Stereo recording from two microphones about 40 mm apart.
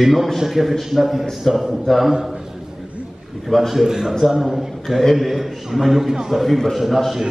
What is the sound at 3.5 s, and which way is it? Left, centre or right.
A man's voice, centre.